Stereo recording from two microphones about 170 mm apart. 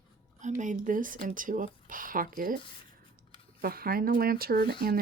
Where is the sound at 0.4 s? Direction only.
50° right (ahead or behind).